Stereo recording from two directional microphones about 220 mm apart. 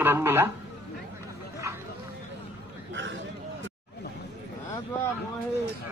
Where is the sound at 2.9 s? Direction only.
55° right (ahead or behind).